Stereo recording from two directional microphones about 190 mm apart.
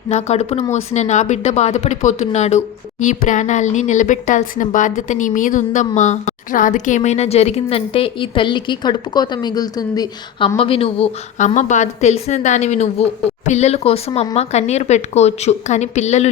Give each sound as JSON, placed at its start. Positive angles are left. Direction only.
{"t": 0.1, "sound": "speech", "side_deg": 35}